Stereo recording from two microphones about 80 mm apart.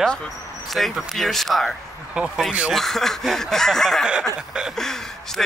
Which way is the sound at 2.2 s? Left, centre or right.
Centre.